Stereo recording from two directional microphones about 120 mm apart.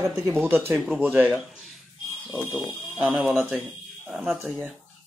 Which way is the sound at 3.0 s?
5° right (ahead or behind).